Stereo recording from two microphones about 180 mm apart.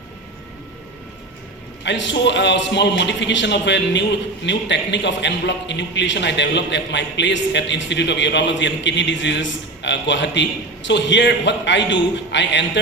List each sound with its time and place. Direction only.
1.8 s a man's voice: 85° left